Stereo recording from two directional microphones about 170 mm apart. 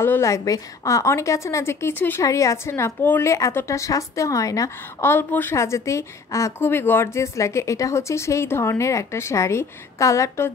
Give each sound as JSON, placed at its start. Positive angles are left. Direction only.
{"t": 0.0, "sound": "a woman's voice", "side_deg": 15}